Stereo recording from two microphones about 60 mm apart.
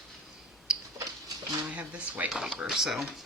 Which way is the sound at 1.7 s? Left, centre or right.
Right.